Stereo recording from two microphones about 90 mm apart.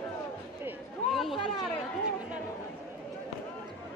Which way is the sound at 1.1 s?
Centre (ahead or behind).